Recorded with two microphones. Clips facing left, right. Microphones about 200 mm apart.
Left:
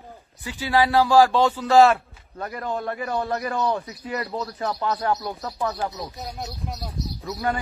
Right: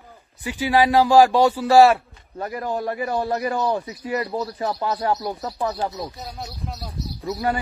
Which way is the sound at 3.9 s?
Centre (ahead or behind).